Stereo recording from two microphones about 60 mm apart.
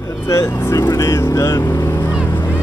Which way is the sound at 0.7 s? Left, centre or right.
Left.